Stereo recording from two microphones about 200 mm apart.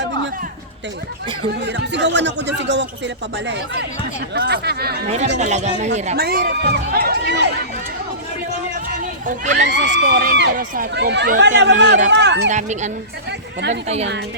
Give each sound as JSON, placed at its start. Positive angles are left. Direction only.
{"t": 1.6, "sound": "speech", "side_deg": -60}
{"t": 5.4, "sound": "speech", "side_deg": -35}
{"t": 6.1, "sound": "speech", "side_deg": -50}
{"t": 9.2, "sound": "speech", "side_deg": -35}
{"t": 9.6, "sound": "speech", "side_deg": -65}
{"t": 12.5, "sound": "speech", "side_deg": -35}